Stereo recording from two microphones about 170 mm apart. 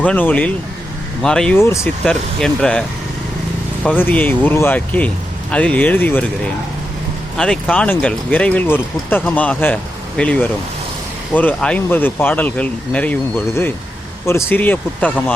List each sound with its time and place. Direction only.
0.0 s speech: 10° left (ahead or behind)
1.5 s speech: 15° left (ahead or behind)
2.0 s speech: 5° left (ahead or behind)
3.8 s speech: 10° left (ahead or behind)
14.3 s speech: 15° left (ahead or behind)